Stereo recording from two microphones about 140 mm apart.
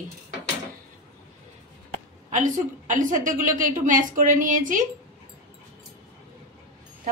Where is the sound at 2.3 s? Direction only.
65° right (ahead or behind).